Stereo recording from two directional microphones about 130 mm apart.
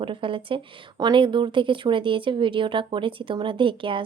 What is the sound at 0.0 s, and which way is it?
Speech, 40° right (ahead or behind).